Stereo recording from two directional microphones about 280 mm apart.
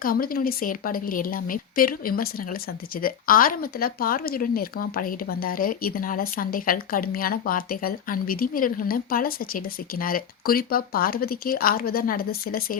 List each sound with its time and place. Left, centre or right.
0.0 s speech: left